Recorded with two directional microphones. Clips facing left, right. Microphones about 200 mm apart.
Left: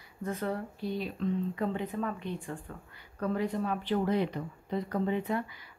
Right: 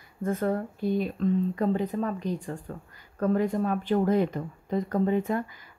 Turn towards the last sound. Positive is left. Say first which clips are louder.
# right 5 dB
turn(degrees=-45)  # may be behind; listen again after turning